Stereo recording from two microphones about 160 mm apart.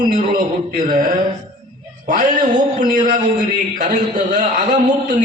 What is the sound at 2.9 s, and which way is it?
A man's voice, 50° right (ahead or behind).